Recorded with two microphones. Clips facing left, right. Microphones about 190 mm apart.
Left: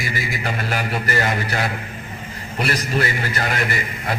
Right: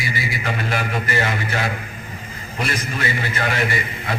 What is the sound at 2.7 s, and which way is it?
Speech, 40° left (ahead or behind).